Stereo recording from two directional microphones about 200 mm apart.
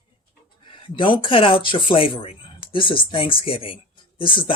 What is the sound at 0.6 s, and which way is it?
Speech, 25° left (ahead or behind).